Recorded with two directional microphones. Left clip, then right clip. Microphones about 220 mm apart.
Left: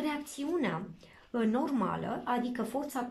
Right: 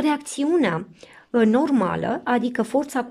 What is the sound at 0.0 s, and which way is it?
A woman's voice, 45° right (ahead or behind).